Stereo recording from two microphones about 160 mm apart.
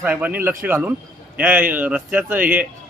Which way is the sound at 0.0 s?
10° right (ahead or behind).